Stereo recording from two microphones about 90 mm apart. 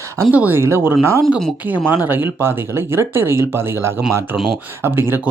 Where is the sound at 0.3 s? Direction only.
20° right (ahead or behind).